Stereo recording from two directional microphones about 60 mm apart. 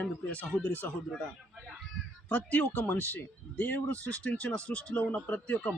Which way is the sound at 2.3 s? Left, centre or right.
Left.